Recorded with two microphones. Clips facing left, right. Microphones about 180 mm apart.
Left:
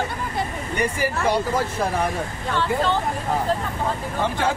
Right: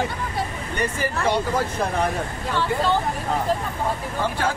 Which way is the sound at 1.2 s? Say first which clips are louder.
Even; 5° left (ahead or behind).